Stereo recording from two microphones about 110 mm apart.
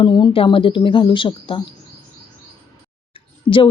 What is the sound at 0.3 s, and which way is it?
Speech, 50° left (ahead or behind).